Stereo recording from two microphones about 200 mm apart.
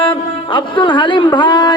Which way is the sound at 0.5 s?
25° left (ahead or behind).